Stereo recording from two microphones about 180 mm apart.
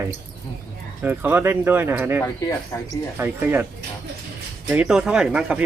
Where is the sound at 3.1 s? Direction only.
10° right (ahead or behind).